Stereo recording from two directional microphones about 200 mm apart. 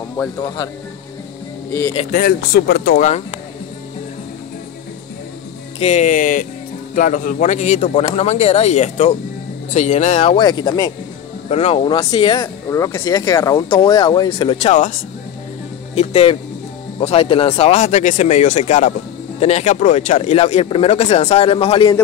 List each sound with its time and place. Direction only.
1.7 s speech: 15° left (ahead or behind)
2.0 s speech: 45° left (ahead or behind)
5.8 s speech: 35° left (ahead or behind)
11.4 s speech: 30° left (ahead or behind)